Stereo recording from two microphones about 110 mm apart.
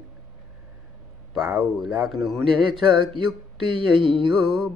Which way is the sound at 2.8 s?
50° right (ahead or behind).